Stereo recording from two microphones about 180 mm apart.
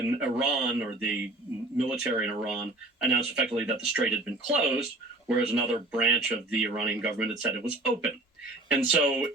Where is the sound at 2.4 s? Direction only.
5° right (ahead or behind).